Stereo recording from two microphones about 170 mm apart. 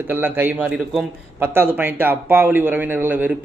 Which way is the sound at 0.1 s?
10° right (ahead or behind).